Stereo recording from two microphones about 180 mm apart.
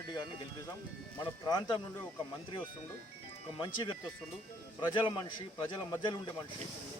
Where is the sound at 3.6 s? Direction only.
25° left (ahead or behind).